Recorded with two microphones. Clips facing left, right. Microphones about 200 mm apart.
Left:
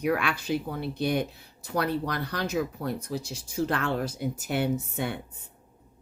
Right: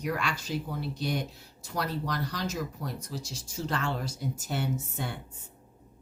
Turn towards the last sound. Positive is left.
turn(degrees=60)  # may be behind; listen again after turning